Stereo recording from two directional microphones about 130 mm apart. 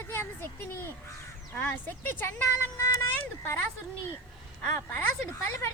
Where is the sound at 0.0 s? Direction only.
20° left (ahead or behind).